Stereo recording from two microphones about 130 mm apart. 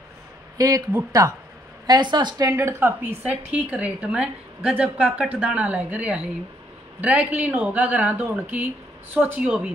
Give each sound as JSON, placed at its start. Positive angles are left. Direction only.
{"t": 0.6, "sound": "speech", "side_deg": -30}
{"t": 1.9, "sound": "a woman's voice", "side_deg": -35}